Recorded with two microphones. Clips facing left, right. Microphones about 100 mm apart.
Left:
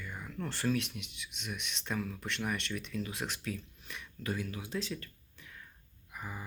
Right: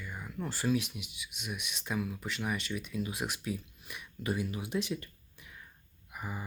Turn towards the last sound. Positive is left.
turn(degrees=-10)  # may be behind; listen again after turning